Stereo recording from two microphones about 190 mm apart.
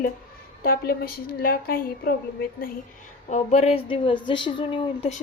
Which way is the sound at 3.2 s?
40° left (ahead or behind).